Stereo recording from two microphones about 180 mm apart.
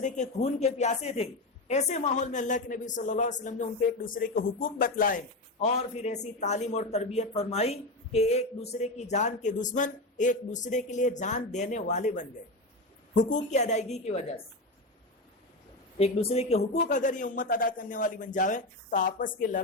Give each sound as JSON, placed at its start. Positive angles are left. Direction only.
{"t": 0.0, "sound": "a woman's voice", "side_deg": 40}
{"t": 13.3, "sound": "a woman's voice", "side_deg": 40}
{"t": 16.0, "sound": "a man's voice", "side_deg": 35}